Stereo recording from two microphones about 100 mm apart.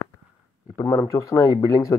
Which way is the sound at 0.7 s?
35° left (ahead or behind).